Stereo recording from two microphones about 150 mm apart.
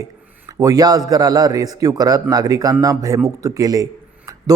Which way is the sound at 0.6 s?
25° right (ahead or behind).